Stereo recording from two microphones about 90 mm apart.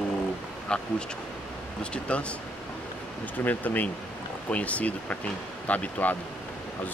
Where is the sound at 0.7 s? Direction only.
10° left (ahead or behind).